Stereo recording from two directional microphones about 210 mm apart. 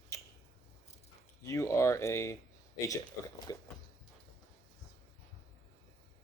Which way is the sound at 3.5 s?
15° left (ahead or behind).